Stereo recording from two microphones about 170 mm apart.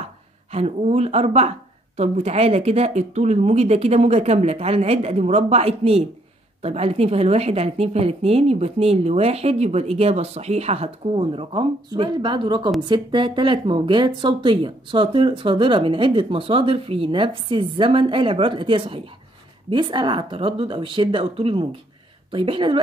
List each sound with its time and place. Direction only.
0.5 s a woman's voice: 40° right (ahead or behind)